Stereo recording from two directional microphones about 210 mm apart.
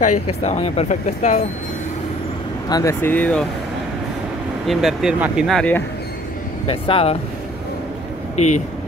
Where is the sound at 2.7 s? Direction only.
15° left (ahead or behind).